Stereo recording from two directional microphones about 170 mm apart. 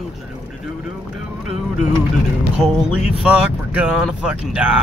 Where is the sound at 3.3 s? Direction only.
5° right (ahead or behind).